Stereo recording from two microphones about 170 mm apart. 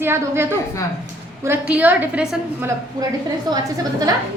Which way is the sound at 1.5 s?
10° right (ahead or behind).